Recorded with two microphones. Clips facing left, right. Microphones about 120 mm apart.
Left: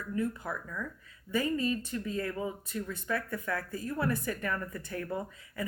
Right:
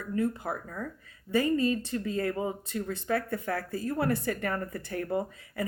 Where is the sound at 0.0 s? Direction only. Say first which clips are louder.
Right 4 dB; 55° right (ahead or behind).